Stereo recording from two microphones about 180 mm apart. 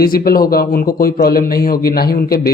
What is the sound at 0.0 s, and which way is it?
A man's voice, 55° left (ahead or behind).